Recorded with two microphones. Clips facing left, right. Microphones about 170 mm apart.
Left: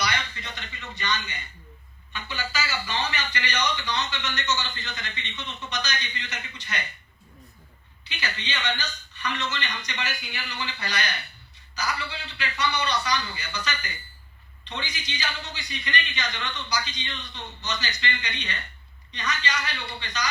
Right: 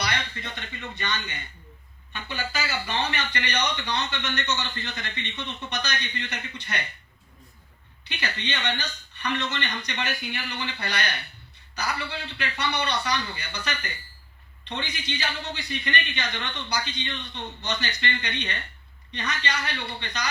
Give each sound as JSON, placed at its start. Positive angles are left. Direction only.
{"t": 0.0, "sound": "a man's voice", "side_deg": -55}
{"t": 8.0, "sound": "a man's voice", "side_deg": -60}